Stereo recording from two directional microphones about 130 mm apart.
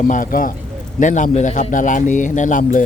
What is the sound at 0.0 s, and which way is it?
Speech, 90° left.